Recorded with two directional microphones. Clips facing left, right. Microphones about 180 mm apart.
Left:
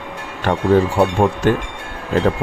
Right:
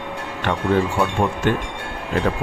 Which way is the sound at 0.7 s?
35° left (ahead or behind).